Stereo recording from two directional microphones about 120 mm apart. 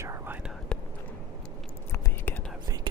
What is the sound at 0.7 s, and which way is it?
Whispering, 5° left (ahead or behind).